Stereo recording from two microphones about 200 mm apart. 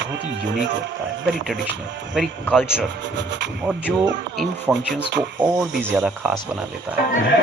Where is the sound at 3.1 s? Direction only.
65° right (ahead or behind).